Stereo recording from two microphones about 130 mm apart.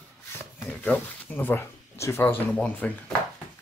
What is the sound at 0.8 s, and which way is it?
Speech, 15° left (ahead or behind).